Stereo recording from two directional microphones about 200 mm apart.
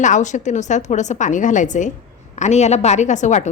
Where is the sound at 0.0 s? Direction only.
40° left (ahead or behind).